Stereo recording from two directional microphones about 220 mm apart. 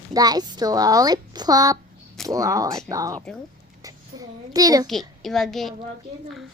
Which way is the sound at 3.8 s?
15° right (ahead or behind).